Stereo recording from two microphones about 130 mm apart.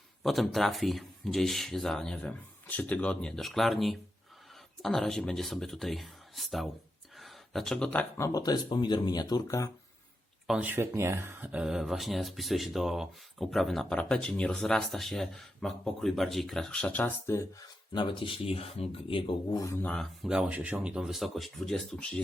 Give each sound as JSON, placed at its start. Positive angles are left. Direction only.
{"t": 0.2, "sound": "speech", "side_deg": 0}
{"t": 7.2, "sound": "a sound", "side_deg": 0}
{"t": 8.2, "sound": "speech", "side_deg": 25}
{"t": 10.4, "sound": "speech", "side_deg": -5}
{"t": 10.7, "sound": "speech", "side_deg": -20}
{"t": 17.9, "sound": "speech", "side_deg": 40}
{"t": 19.5, "sound": "speech", "side_deg": 25}
{"t": 19.7, "sound": "speech", "side_deg": 10}
{"t": 20.2, "sound": "speech", "side_deg": -5}